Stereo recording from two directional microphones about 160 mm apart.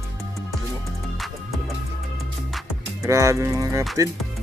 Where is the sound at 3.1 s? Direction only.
20° right (ahead or behind).